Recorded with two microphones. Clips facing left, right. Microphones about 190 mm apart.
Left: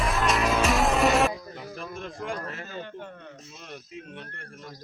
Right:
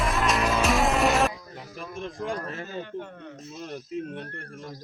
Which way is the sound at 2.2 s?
30° right (ahead or behind).